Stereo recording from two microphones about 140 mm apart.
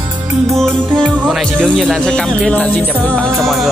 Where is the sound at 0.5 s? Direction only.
5° left (ahead or behind).